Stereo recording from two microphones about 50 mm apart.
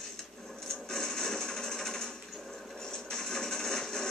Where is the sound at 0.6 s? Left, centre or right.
Centre.